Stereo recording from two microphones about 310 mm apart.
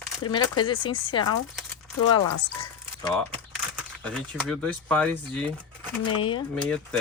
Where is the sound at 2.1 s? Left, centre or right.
Left.